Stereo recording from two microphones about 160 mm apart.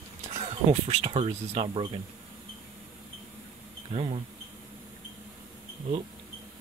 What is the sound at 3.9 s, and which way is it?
Speech, 35° right (ahead or behind).